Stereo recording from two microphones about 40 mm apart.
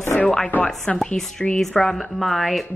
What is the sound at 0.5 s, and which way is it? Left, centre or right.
Speech, left.